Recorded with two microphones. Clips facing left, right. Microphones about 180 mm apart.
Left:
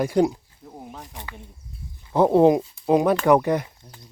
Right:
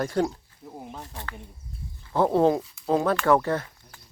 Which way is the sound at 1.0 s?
15° left (ahead or behind).